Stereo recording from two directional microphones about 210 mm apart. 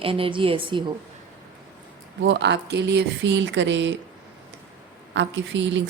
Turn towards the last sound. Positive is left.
turn(degrees=-60)  # may be behind; listen again after turning